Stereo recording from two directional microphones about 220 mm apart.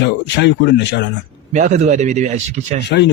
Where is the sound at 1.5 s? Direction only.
35° right (ahead or behind).